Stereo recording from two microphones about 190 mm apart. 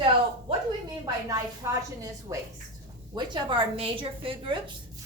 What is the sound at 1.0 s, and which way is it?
A woman's voice, 15° right (ahead or behind).